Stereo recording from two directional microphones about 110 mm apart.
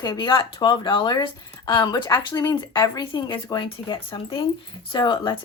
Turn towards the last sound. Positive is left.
turn(degrees=45)  # may be behind; listen again after turning